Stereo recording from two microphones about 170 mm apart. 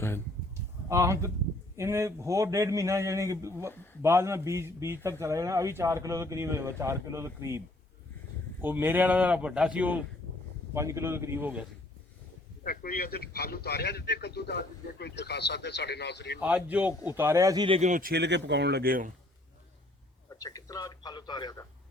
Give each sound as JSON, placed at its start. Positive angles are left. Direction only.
{"t": 0.9, "sound": "a man's voice", "side_deg": -15}
{"t": 8.6, "sound": "a man's voice", "side_deg": -10}
{"t": 12.6, "sound": "a man's voice", "side_deg": 60}
{"t": 16.4, "sound": "a man's voice", "side_deg": -10}
{"t": 17.7, "sound": "speech", "side_deg": -45}
{"t": 18.1, "sound": "speech", "side_deg": -85}
{"t": 20.4, "sound": "a man's voice", "side_deg": 20}